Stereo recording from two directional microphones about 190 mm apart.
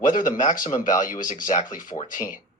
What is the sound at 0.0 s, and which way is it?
Speech, 45° left (ahead or behind).